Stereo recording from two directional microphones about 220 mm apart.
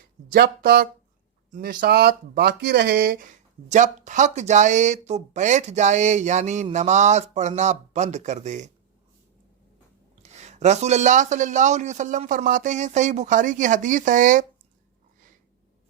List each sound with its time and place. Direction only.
0.3 s speech: 45° right (ahead or behind)
10.2 s speech: 30° right (ahead or behind)